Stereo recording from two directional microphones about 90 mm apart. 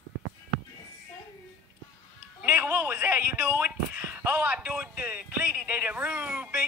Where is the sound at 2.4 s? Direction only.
25° right (ahead or behind).